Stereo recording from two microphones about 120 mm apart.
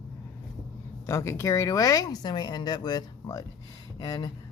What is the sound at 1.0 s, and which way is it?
Speech, 25° left (ahead or behind).